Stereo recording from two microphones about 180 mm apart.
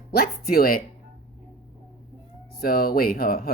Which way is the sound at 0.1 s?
55° left (ahead or behind).